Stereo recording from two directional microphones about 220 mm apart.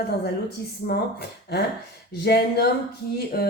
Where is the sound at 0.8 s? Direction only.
45° left (ahead or behind).